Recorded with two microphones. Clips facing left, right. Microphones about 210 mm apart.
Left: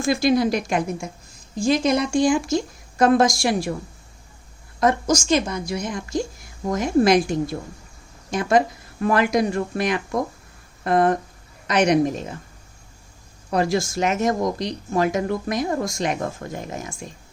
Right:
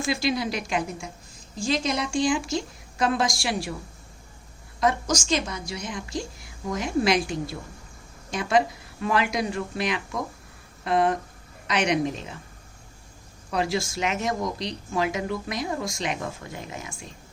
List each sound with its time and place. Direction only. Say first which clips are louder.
0.0 s speech: left 7 dB; 50° left (ahead or behind)
4.8 s speech: left 5 dB; 50° left (ahead or behind)
13.5 s speech: left 5 dB; 50° left (ahead or behind)